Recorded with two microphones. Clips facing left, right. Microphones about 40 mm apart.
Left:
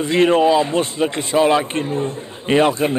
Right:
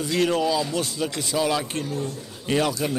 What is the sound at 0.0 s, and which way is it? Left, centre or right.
Speech, left.